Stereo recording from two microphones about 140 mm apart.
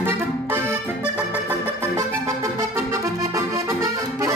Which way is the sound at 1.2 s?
15° right (ahead or behind).